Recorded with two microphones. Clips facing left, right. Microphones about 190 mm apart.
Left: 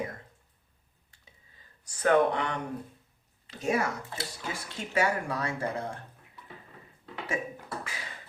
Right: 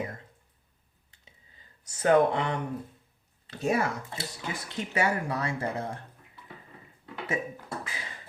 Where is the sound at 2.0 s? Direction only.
25° right (ahead or behind).